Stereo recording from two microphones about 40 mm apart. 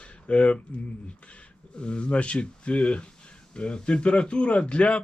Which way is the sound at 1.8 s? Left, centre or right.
Left.